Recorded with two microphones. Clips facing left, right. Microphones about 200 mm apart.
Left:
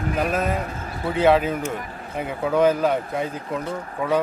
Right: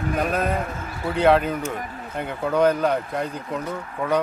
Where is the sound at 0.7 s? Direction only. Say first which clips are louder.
Even; 35° left (ahead or behind).